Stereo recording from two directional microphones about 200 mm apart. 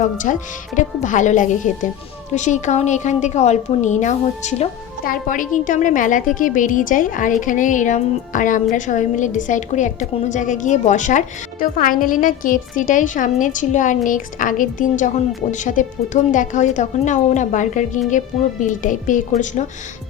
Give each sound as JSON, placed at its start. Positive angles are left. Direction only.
{"t": 0.3, "sound": "a woman's voice", "side_deg": 40}